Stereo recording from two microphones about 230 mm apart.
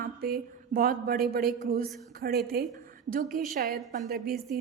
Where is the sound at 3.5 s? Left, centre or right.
Right.